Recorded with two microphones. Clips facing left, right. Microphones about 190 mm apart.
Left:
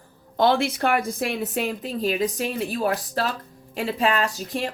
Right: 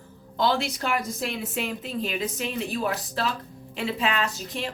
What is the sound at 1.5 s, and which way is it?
A woman's voice, 40° left (ahead or behind).